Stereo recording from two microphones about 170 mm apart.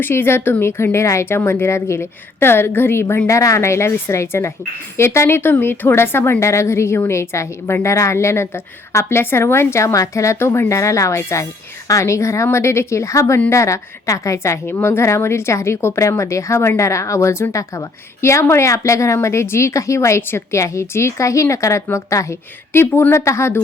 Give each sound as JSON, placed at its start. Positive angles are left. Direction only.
{"t": 0.0, "sound": "a woman's voice", "side_deg": 15}